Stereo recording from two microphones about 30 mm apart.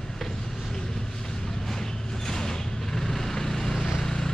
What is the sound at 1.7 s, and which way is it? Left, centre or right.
Vehicle, centre.